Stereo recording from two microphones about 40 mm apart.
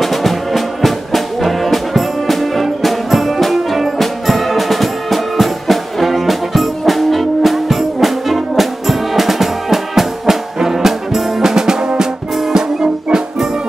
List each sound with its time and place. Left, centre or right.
0.0 s music: centre
12.5 s music: centre